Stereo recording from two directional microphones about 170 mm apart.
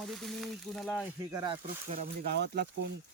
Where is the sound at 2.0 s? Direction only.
70° right (ahead or behind).